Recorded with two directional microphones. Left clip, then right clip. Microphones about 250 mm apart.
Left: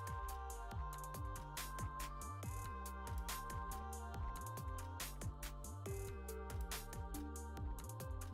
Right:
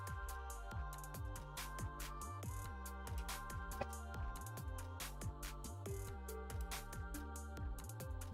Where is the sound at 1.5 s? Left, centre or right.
Centre.